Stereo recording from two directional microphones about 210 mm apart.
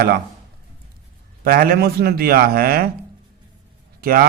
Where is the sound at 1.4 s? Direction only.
45° right (ahead or behind).